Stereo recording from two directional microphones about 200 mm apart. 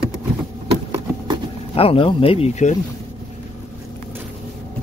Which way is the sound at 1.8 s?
25° left (ahead or behind).